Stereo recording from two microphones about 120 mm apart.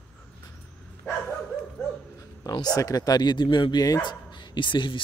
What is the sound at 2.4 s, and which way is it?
Speech, 30° left (ahead or behind).